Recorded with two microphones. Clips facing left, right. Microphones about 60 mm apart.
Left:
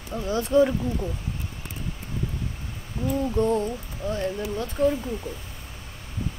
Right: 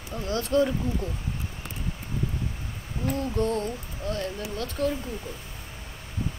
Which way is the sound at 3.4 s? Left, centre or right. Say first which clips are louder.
Left 4 dB; centre.